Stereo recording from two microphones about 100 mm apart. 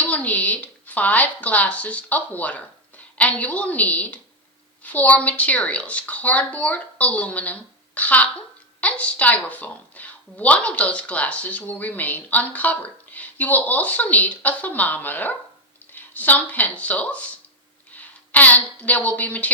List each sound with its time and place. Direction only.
0.0 s a woman's voice: 15° left (ahead or behind)